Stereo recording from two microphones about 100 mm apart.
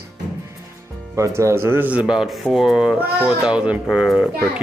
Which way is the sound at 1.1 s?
30° right (ahead or behind).